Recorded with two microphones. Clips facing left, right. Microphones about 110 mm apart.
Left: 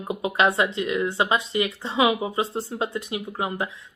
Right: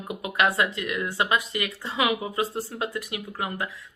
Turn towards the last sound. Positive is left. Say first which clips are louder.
# left 3 dB
turn(degrees=25)  # may be behind; listen again after turning